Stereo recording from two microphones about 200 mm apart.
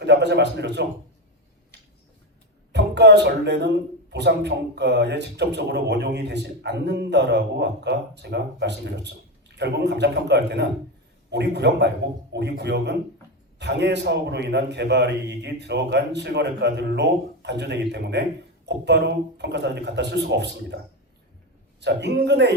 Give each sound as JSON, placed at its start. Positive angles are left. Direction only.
{"t": 0.0, "sound": "a man's voice", "side_deg": -60}
{"t": 2.7, "sound": "a man's voice", "side_deg": -60}
{"t": 21.8, "sound": "a man's voice", "side_deg": -60}